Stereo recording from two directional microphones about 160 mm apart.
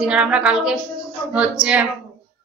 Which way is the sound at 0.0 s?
5° right (ahead or behind).